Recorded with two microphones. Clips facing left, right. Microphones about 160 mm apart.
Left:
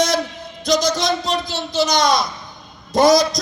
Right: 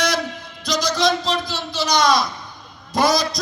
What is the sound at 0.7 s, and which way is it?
A man's voice, 20° left (ahead or behind).